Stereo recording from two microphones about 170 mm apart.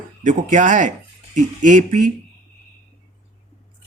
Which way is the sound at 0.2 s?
50° right (ahead or behind).